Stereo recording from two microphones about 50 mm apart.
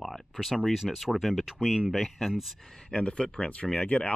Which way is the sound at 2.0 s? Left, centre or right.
Centre.